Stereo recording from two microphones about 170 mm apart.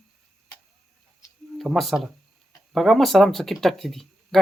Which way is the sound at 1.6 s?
Centre (ahead or behind).